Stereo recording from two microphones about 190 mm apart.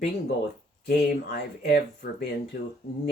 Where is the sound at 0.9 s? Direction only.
55° left (ahead or behind).